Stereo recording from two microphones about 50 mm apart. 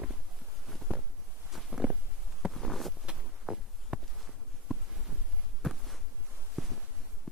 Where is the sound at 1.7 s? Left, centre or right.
Centre.